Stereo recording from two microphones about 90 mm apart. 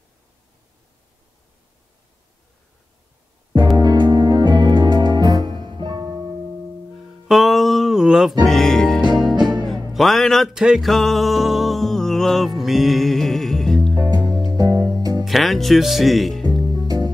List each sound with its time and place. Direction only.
3.7 s music: 55° right (ahead or behind)
7.1 s music: centre (ahead or behind)
8.5 s music: 5° left (ahead or behind)
10.5 s music: 5° right (ahead or behind)
13.9 s music: 50° right (ahead or behind)
15.2 s speech: centre (ahead or behind)
16.4 s music: 50° right (ahead or behind)